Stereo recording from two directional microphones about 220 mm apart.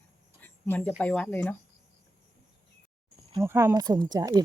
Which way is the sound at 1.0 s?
5° left (ahead or behind).